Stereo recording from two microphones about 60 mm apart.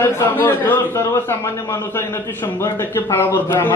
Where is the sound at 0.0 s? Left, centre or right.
Left.